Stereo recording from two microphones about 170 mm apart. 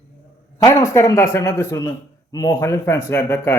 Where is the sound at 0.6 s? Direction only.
20° left (ahead or behind).